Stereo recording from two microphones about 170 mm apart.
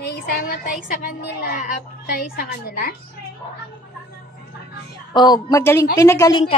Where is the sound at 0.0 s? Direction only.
65° left (ahead or behind).